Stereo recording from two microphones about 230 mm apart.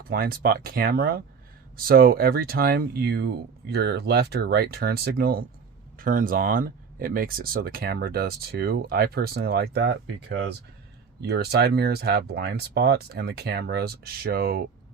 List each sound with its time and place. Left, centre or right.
0.1 s speech: right